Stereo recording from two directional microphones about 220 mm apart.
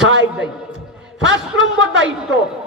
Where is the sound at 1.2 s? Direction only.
55° right (ahead or behind).